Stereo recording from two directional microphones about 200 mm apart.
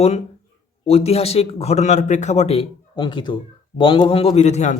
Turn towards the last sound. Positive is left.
turn(degrees=35)  # may be behind; listen again after turning